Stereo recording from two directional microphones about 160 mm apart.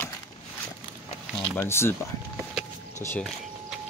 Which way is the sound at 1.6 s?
15° left (ahead or behind).